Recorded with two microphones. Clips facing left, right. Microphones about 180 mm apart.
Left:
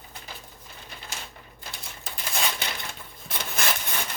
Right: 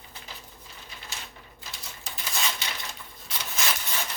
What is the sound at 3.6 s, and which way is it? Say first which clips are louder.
Rub: left 2 dB; 55° left (ahead or behind).